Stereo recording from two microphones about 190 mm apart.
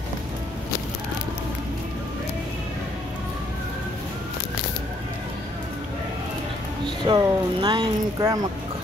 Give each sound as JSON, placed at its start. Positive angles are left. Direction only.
{"t": 7.1, "sound": "speech", "side_deg": -25}